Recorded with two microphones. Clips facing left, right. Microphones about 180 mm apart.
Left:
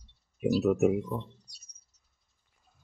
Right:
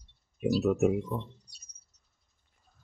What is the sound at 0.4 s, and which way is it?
Speech, 5° left (ahead or behind).